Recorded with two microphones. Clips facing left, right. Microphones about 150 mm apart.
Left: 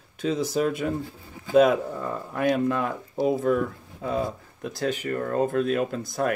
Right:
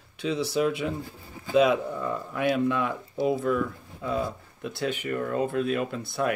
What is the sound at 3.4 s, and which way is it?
Speech, 45° left (ahead or behind).